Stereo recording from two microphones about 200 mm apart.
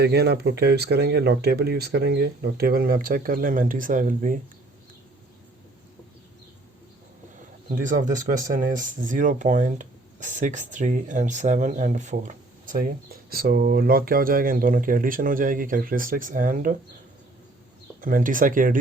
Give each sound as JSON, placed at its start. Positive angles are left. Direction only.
{"t": 0.0, "sound": "speech", "side_deg": -55}
{"t": 7.8, "sound": "speech", "side_deg": -40}
{"t": 18.0, "sound": "speech", "side_deg": -40}